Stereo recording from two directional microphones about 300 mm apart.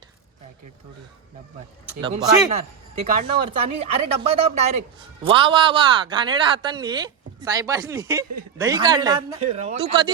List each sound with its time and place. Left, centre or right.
2.0 s speech: centre